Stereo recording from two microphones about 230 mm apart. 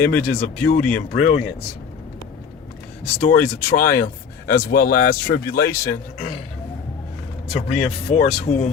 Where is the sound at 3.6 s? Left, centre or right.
Left.